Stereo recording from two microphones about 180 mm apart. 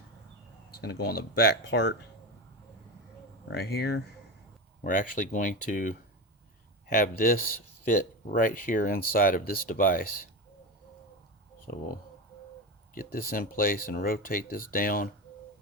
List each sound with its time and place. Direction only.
0.8 s speech: 60° left (ahead or behind)
3.5 s speech: 65° left (ahead or behind)
4.8 s speech: 50° left (ahead or behind)
12.9 s speech: 50° left (ahead or behind)